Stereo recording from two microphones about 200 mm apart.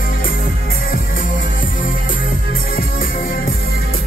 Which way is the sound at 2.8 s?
45° left (ahead or behind).